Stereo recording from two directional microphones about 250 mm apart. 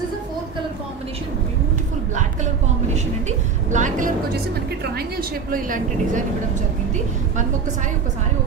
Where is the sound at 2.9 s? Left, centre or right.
Right.